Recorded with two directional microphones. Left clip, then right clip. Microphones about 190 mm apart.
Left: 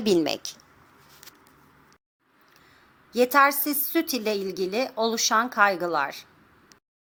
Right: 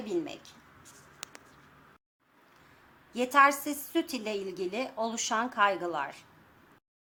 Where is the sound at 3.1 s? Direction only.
20° left (ahead or behind).